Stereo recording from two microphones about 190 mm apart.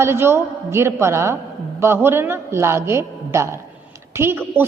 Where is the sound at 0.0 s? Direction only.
15° right (ahead or behind).